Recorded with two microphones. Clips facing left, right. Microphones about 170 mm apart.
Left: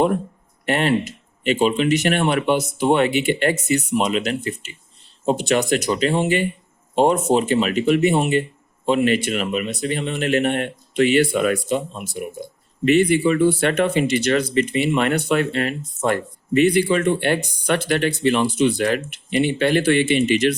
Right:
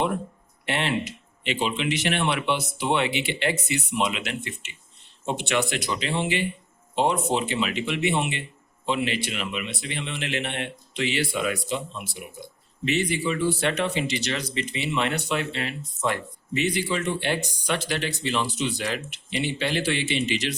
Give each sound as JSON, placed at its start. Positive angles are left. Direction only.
{"t": 0.6, "sound": "a man's voice", "side_deg": 45}